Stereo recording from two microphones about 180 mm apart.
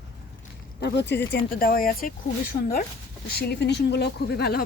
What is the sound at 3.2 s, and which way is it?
Speech, 60° left (ahead or behind).